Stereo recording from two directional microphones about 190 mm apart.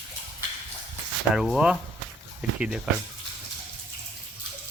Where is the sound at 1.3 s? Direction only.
5° right (ahead or behind).